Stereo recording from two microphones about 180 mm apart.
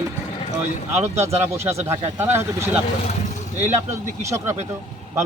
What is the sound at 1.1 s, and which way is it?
Speech, 15° right (ahead or behind).